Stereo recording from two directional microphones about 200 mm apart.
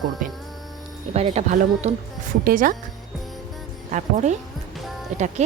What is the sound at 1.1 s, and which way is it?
Speech, 30° right (ahead or behind).